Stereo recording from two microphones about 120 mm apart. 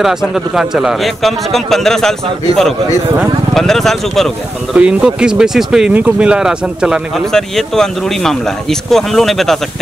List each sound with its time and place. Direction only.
0.0 s speech: 5° right (ahead or behind)
3.2 s speech: 5° left (ahead or behind)
4.7 s speech: 10° right (ahead or behind)